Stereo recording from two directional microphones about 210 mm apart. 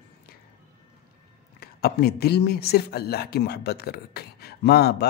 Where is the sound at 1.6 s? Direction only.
50° left (ahead or behind).